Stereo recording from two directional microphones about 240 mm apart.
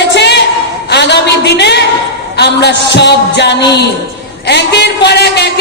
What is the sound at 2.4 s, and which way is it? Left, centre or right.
A man's voice, left.